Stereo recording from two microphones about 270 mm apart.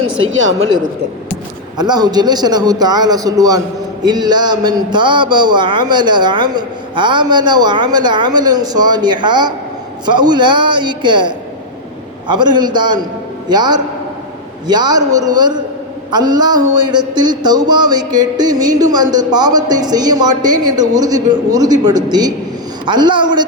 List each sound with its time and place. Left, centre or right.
0.2 s speech: right
1.8 s a man's voice: centre